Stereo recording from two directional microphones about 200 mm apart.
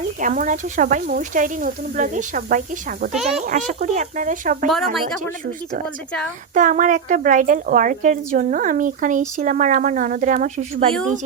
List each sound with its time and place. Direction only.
0.2 s speech: 40° right (ahead or behind)
6.5 s speech: 40° right (ahead or behind)